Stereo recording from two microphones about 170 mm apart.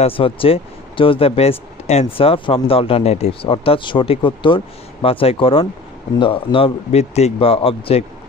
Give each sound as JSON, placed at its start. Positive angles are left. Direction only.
{"t": 0.0, "sound": "speech", "side_deg": 30}